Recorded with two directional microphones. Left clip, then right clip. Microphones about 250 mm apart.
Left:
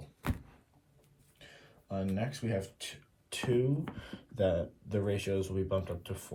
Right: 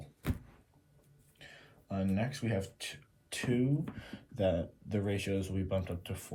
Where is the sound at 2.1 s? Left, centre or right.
Centre.